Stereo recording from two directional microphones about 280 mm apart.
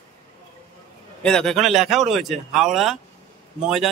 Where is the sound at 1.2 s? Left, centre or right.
Centre.